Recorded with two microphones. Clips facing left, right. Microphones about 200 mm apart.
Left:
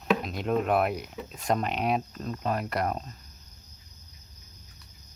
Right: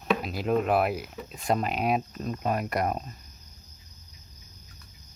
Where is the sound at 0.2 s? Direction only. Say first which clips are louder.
Right 1 dB; 5° right (ahead or behind).